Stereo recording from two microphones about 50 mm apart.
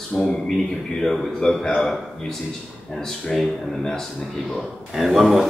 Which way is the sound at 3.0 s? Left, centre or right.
Centre.